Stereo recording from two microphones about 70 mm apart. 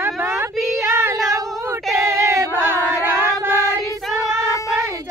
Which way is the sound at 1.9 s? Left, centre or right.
Right.